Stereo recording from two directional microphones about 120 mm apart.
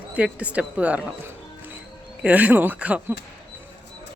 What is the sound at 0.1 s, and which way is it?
Speech, 10° right (ahead or behind).